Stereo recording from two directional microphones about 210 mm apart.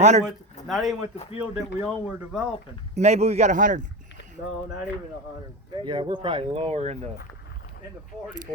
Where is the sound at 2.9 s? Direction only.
30° right (ahead or behind).